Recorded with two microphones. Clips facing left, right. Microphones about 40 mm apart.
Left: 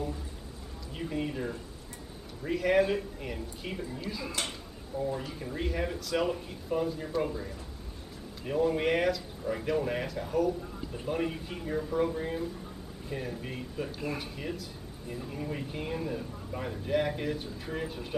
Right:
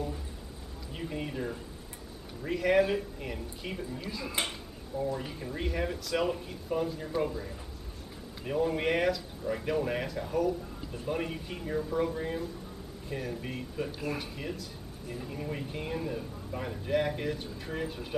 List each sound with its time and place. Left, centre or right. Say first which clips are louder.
0.9 s speech: left 2 dB; centre
4.3 s speech: right 5 dB; centre
5.3 s speech: left 1 dB; centre